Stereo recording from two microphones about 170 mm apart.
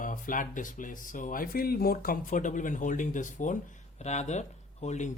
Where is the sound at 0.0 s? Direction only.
50° left (ahead or behind).